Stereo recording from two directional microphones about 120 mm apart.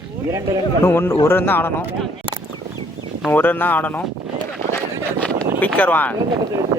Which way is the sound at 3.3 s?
15° left (ahead or behind).